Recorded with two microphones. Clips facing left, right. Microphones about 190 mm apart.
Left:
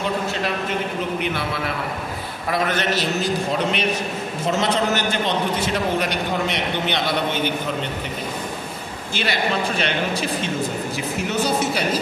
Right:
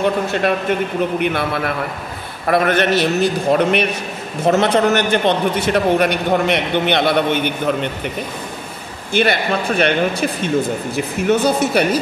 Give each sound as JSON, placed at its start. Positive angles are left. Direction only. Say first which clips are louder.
{"t": 0.0, "sound": "a man's voice", "louder": "right 7 dB", "side_deg": -55}
{"t": 9.1, "sound": "a man's voice", "louder": "right 6 dB", "side_deg": -55}
{"t": 11.2, "sound": "a man's voice", "louder": "right 7 dB", "side_deg": -60}